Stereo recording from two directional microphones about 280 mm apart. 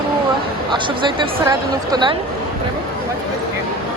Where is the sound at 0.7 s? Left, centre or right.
Centre.